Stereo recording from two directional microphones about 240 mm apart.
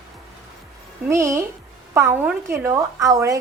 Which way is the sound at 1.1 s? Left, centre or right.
Centre.